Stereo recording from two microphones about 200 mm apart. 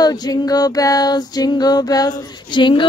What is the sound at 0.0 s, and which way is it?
Music, 20° left (ahead or behind).